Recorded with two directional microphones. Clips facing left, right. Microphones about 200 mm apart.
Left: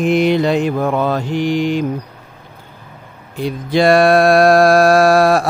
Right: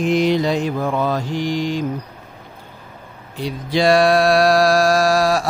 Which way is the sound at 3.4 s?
50° left (ahead or behind).